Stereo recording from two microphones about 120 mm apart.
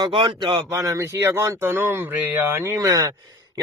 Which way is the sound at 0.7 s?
25° right (ahead or behind).